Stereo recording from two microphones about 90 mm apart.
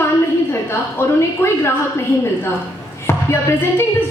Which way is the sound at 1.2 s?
30° left (ahead or behind).